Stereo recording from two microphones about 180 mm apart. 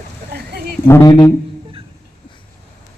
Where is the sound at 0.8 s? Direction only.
15° left (ahead or behind).